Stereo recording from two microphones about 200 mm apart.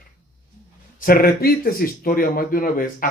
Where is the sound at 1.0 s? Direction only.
45° left (ahead or behind).